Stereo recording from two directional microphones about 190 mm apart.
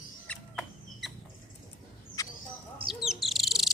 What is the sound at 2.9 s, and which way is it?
Bird, centre (ahead or behind).